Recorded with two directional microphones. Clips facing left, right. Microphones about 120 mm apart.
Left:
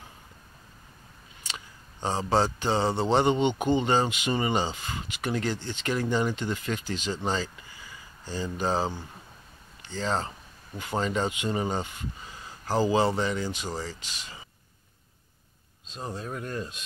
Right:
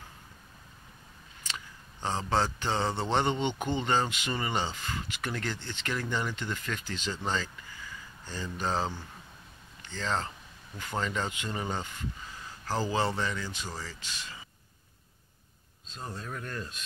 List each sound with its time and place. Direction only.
1.5 s a sound: 15° left (ahead or behind)
2.4 s speech: 15° left (ahead or behind)
15.9 s speech: 20° left (ahead or behind)